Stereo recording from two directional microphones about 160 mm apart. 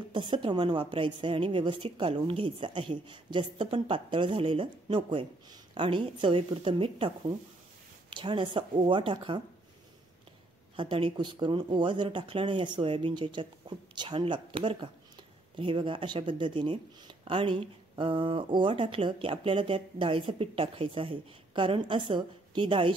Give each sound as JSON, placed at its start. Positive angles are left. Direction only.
{"t": 0.1, "sound": "speech", "side_deg": -30}
{"t": 10.8, "sound": "speech", "side_deg": -30}